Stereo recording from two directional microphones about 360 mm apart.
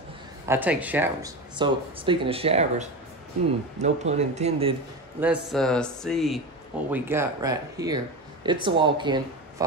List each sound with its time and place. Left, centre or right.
0.5 s speech: centre
5.2 s speech: centre